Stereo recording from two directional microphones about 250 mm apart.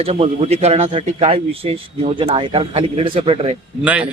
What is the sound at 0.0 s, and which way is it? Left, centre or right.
Speech, right.